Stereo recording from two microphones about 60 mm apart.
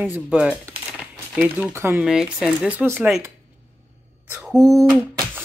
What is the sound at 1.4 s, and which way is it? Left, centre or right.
Speech, right.